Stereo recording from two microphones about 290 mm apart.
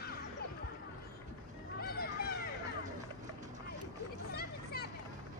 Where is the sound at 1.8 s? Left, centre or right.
Left.